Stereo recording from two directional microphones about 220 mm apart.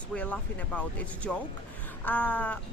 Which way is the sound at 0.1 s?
5° left (ahead or behind).